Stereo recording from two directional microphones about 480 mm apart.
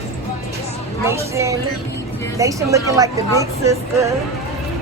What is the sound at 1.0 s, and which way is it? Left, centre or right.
A woman's voice, centre.